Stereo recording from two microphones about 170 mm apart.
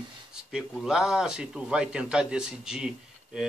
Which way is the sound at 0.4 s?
5° right (ahead or behind).